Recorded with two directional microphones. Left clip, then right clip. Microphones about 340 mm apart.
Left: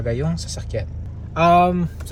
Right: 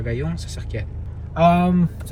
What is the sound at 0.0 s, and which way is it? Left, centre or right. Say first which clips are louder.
Speech: left 3 dB; centre.